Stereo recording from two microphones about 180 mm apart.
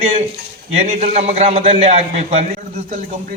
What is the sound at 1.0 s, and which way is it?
Speech, 35° right (ahead or behind).